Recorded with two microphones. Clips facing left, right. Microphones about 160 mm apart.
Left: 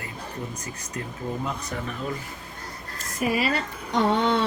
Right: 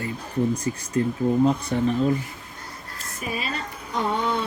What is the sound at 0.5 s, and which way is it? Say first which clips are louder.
Speech: right 10 dB; 30° right (ahead or behind).